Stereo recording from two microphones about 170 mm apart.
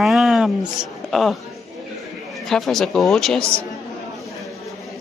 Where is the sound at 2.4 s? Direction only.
Centre (ahead or behind).